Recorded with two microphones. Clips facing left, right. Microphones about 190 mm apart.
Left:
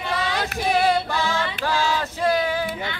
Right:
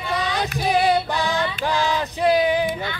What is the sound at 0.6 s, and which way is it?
Female singing, 15° right (ahead or behind).